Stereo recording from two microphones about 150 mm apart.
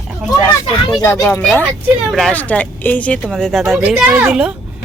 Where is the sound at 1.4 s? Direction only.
5° left (ahead or behind).